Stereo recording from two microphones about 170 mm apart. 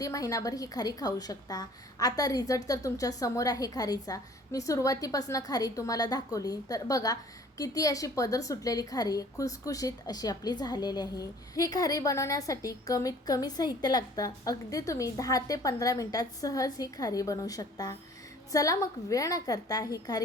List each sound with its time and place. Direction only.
0.0 s a woman's voice: 20° left (ahead or behind)